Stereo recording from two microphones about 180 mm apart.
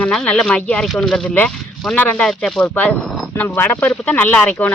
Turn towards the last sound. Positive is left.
turn(degrees=5)  # may be behind; listen again after turning